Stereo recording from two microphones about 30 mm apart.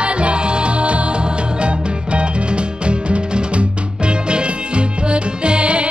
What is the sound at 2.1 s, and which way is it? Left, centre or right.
Music, right.